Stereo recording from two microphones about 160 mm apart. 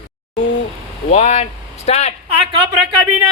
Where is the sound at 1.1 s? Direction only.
45° left (ahead or behind).